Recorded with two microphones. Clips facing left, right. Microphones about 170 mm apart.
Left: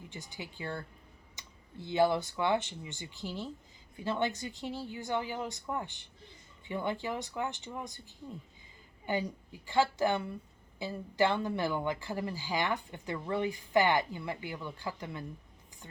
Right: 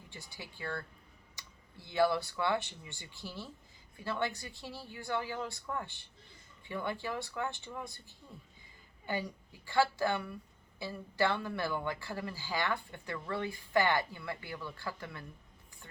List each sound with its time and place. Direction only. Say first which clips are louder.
0.1 s a woman's voice: left 2 dB; 20° left (ahead or behind)